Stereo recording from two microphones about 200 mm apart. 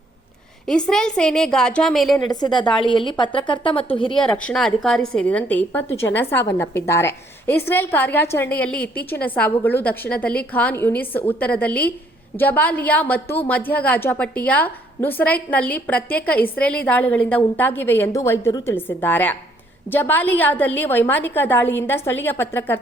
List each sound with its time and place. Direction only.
0.7 s a woman's voice: 5° left (ahead or behind)
2.3 s a woman's voice: 20° left (ahead or behind)
4.2 s a woman's voice: 5° left (ahead or behind)